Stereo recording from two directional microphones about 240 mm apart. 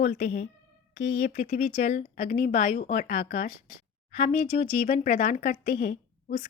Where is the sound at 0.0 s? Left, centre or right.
Left.